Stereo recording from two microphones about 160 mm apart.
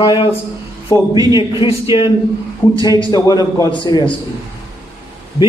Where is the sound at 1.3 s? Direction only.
30° left (ahead or behind).